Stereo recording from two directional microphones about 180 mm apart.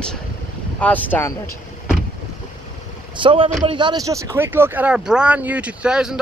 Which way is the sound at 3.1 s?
30° right (ahead or behind).